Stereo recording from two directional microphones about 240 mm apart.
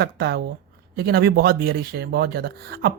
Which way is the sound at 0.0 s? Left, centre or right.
Right.